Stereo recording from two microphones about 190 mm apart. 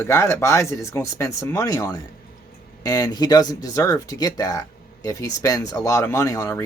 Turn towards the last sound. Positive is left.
turn(degrees=15)  # may be behind; listen again after turning